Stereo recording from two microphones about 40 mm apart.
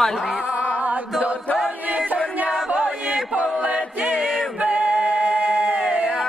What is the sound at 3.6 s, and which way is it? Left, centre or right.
Chant, right.